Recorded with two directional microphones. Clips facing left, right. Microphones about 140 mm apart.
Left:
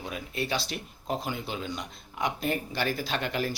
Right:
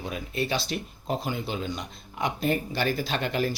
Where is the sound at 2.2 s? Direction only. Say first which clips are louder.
Right 3 dB; 10° left (ahead or behind).